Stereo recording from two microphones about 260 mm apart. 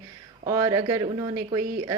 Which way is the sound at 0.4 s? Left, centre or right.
Centre.